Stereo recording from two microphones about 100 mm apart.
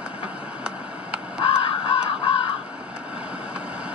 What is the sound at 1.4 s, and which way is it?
Crow, 65° left (ahead or behind).